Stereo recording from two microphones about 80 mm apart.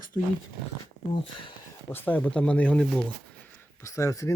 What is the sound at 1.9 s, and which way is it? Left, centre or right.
Speech, left.